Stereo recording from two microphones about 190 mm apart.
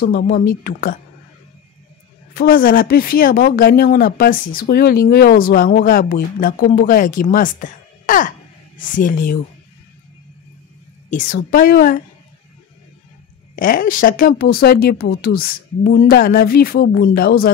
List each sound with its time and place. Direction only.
0.0 s speech: 55° left (ahead or behind)
2.3 s speech: 50° left (ahead or behind)
11.1 s speech: 45° left (ahead or behind)
13.6 s speech: 45° left (ahead or behind)